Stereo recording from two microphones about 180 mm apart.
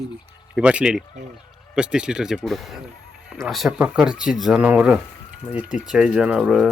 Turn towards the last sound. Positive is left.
turn(degrees=-5)  # may be behind; listen again after turning